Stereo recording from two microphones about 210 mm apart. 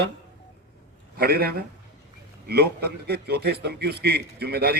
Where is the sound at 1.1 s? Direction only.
45° right (ahead or behind).